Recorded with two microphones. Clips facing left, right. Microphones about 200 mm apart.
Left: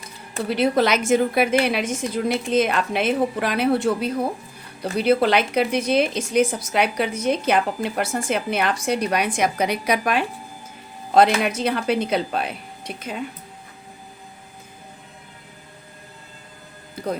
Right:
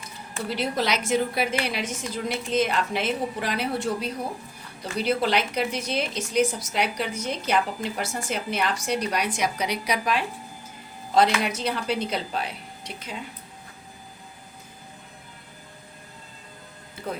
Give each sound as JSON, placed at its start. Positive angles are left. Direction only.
{"t": 0.4, "sound": "a woman's voice", "side_deg": 60}
{"t": 11.4, "sound": "a woman's voice", "side_deg": 55}
{"t": 17.0, "sound": "music", "side_deg": 40}